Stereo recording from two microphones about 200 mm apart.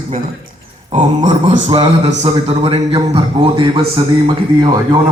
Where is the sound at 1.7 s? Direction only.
25° right (ahead or behind).